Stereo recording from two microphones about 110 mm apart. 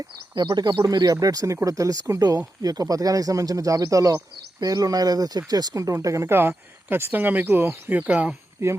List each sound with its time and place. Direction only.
0.3 s speech: 40° right (ahead or behind); by 8.3 s 15° right (ahead or behind)
8.6 s speech: 25° right (ahead or behind)